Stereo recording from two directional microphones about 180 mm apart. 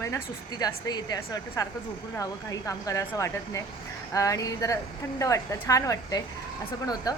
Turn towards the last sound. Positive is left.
turn(degrees=20)  # may be behind; listen again after turning